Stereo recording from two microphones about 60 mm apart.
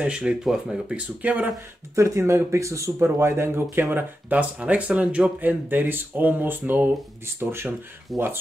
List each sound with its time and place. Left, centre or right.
0.0 s speech: centre
0.4 s speech: centre; by 1.5 s right
2.0 s speech: right
3.9 s speech: right
8.1 s speech: centre